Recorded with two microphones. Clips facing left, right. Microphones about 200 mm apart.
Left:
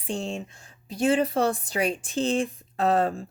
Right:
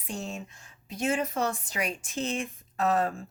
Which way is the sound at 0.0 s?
30° left (ahead or behind).